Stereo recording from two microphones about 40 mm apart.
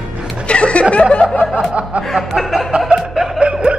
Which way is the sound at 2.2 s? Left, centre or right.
Centre.